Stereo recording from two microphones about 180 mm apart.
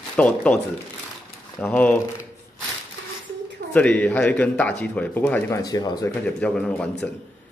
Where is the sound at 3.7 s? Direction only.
10° left (ahead or behind).